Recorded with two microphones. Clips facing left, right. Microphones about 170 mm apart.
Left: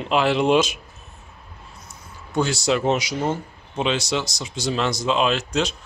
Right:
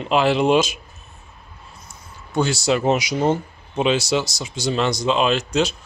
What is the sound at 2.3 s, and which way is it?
Speech, centre (ahead or behind).